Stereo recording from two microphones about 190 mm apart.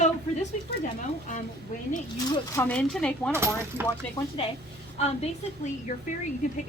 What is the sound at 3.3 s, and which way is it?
Coin, 15° right (ahead or behind).